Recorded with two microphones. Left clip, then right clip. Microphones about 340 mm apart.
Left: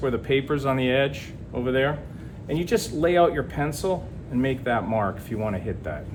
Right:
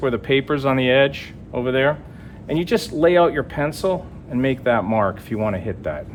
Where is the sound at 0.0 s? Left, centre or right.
Right.